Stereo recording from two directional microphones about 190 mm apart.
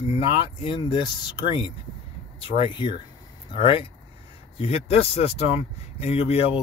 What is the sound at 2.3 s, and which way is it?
Speech, 25° left (ahead or behind).